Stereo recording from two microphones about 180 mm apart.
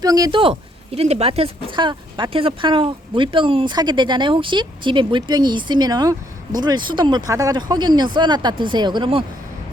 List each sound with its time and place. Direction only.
0.0 s speech: 20° right (ahead or behind)